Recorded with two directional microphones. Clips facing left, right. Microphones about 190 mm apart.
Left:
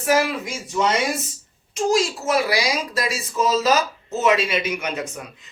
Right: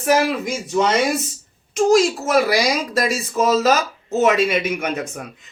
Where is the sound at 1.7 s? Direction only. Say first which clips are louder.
Right 6 dB; 45° right (ahead or behind).